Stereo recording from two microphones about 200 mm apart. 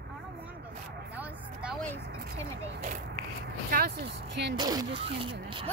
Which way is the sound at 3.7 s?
55° right (ahead or behind).